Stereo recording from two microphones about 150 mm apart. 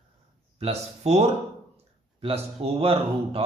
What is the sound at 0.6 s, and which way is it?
Speech, 45° right (ahead or behind).